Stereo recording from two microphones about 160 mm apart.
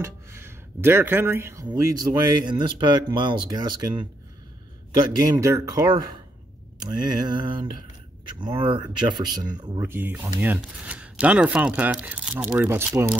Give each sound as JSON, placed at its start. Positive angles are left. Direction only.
{"t": 0.0, "sound": "speech", "side_deg": -15}
{"t": 9.8, "sound": "speech", "side_deg": -15}